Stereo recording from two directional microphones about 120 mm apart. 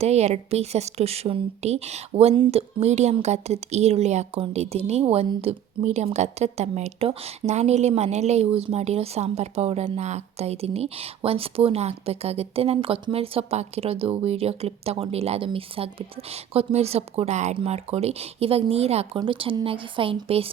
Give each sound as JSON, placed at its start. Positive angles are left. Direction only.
{"t": 0.0, "sound": "a woman's voice", "side_deg": -65}
{"t": 19.2, "sound": "speech", "side_deg": -45}